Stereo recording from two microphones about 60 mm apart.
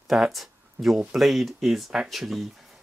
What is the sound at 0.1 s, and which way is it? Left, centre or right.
Speech, centre.